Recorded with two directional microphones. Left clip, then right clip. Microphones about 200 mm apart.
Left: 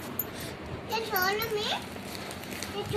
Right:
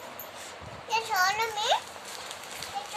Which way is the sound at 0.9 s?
20° right (ahead or behind).